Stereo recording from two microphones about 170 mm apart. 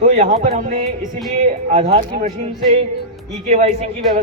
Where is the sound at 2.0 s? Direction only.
50° right (ahead or behind).